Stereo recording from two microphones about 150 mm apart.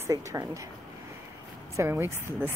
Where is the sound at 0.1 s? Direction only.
25° right (ahead or behind).